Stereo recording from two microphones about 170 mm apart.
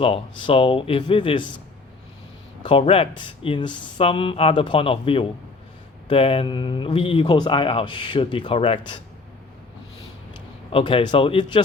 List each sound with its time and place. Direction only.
0.0 s speech: 35° left (ahead or behind)
2.6 s speech: 30° left (ahead or behind)
10.7 s speech: 35° left (ahead or behind)